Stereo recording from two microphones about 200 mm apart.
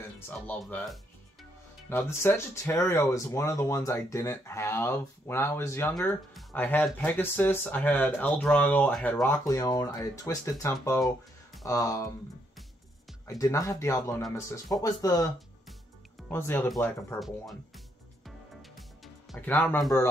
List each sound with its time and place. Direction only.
0.3 s speech: 5° left (ahead or behind)
13.4 s speech: 15° left (ahead or behind)
16.3 s speech: 10° left (ahead or behind)
18.2 s music: centre (ahead or behind)
19.3 s speech: 10° left (ahead or behind)